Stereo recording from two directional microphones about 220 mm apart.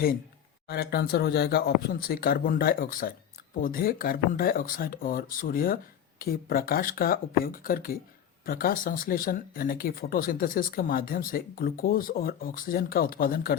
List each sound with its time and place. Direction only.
0.7 s speech: 45° left (ahead or behind)